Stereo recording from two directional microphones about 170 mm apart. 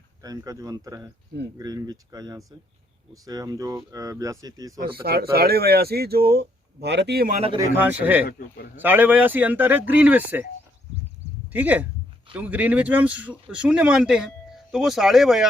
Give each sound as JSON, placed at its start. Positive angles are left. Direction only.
{"t": 0.2, "sound": "speech", "side_deg": -20}
{"t": 5.0, "sound": "speech", "side_deg": -65}
{"t": 6.8, "sound": "speech", "side_deg": -85}
{"t": 7.3, "sound": "speech", "side_deg": -35}
{"t": 7.8, "sound": "speech", "side_deg": -10}
{"t": 11.5, "sound": "speech", "side_deg": -10}